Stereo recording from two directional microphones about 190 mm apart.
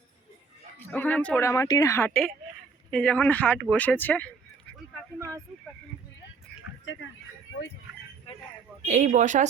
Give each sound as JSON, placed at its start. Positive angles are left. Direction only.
{"t": 0.9, "sound": "a woman's voice", "side_deg": 10}
{"t": 8.9, "sound": "speech", "side_deg": -40}